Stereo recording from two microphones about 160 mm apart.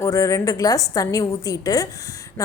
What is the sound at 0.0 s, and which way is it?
A woman's voice, 20° left (ahead or behind).